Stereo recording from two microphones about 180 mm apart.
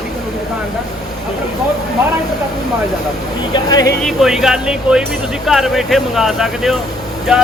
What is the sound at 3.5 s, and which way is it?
Speech, 20° left (ahead or behind).